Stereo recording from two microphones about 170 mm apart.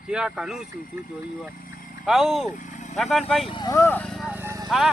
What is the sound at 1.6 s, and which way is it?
Vehicle, 55° left (ahead or behind).